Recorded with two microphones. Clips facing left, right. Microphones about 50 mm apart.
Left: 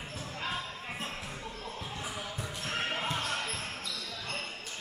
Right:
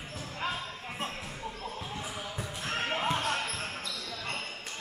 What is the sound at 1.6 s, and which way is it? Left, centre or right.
Basketball bounce, centre.